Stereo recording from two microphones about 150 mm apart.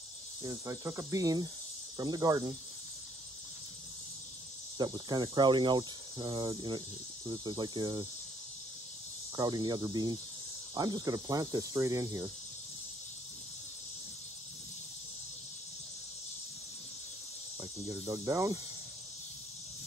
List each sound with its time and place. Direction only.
0.4 s cricket: 25° right (ahead or behind)
4.7 s cricket: 25° right (ahead or behind)
9.4 s cricket: 25° right (ahead or behind)
17.6 s speech: 20° right (ahead or behind)